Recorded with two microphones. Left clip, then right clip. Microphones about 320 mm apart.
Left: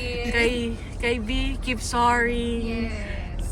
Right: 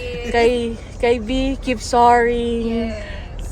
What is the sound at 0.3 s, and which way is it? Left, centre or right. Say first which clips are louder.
Speech: right 8 dB; centre.